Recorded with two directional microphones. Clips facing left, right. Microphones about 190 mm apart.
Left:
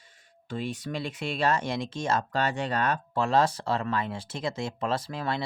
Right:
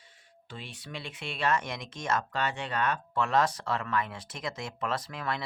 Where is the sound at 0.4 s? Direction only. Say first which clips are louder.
Left 11 dB; 45° left (ahead or behind).